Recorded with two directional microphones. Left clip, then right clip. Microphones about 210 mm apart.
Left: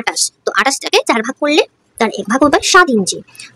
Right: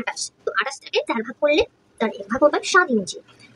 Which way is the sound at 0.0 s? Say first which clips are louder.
Left 9 dB; 55° left (ahead or behind).